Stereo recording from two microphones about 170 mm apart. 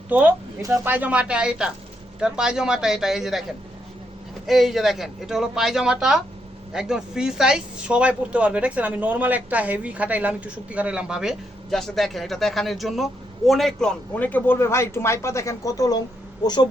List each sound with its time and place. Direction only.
0.1 s speech: 10° right (ahead or behind)
4.4 s speech: centre (ahead or behind); by 16.6 s 25° left (ahead or behind)